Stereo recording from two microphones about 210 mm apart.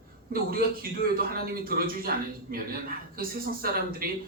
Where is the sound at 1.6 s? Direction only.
45° right (ahead or behind).